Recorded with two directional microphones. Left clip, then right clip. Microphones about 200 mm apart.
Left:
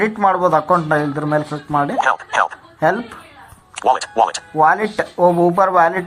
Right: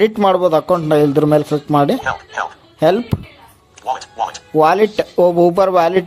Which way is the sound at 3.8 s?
50° left (ahead or behind).